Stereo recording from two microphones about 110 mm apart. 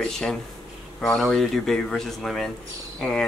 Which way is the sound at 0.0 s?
5° left (ahead or behind).